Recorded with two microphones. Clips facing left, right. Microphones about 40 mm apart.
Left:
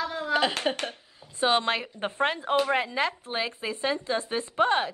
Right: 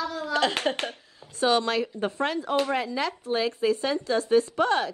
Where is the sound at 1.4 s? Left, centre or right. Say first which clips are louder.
Right 1 dB; left.